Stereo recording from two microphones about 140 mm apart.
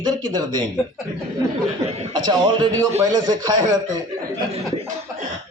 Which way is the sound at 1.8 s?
45° right (ahead or behind).